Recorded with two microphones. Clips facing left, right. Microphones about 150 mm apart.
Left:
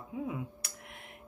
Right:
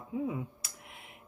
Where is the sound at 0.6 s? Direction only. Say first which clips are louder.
Left 2 dB; centre (ahead or behind).